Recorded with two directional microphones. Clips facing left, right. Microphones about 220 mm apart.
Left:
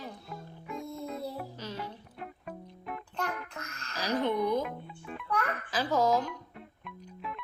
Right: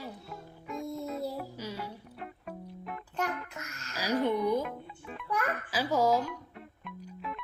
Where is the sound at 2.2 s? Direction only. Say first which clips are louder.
Even; centre (ahead or behind).